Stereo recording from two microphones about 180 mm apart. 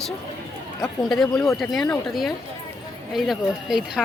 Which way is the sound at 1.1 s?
Centre (ahead or behind).